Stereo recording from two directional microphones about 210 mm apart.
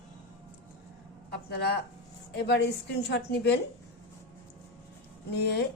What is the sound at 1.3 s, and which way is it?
A woman's voice, 50° left (ahead or behind).